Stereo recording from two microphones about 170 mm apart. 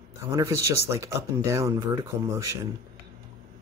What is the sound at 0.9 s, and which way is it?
Speech, 20° right (ahead or behind).